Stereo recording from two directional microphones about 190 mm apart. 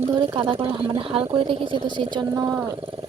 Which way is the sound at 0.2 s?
25° right (ahead or behind).